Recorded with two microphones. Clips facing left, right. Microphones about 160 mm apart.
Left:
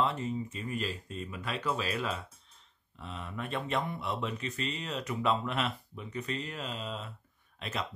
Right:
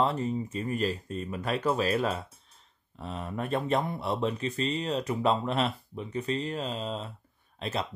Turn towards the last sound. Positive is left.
turn(degrees=-35)  # may be behind; listen again after turning